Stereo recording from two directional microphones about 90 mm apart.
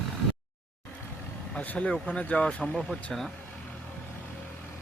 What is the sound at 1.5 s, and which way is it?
Speech, 15° left (ahead or behind).